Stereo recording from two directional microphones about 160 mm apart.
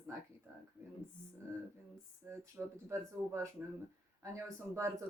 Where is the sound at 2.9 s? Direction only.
15° right (ahead or behind).